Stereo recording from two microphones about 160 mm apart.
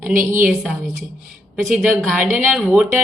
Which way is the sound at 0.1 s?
55° right (ahead or behind).